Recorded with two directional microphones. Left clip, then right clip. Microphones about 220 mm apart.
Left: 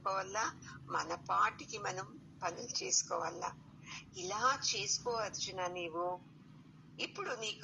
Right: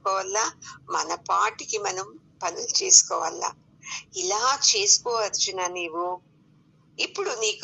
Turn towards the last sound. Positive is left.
turn(degrees=-60)  # may be behind; listen again after turning